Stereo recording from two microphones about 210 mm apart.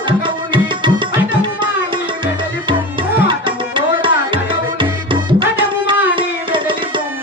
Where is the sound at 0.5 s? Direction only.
25° right (ahead or behind).